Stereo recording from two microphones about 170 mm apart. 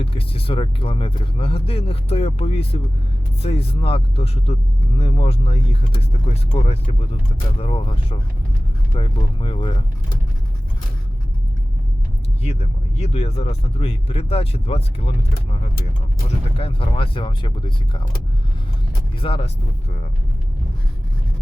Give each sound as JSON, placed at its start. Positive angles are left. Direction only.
{"t": 0.0, "sound": "speech", "side_deg": 30}
{"t": 12.4, "sound": "speech", "side_deg": 40}
{"t": 16.6, "sound": "speech", "side_deg": 35}
{"t": 19.2, "sound": "speech", "side_deg": 30}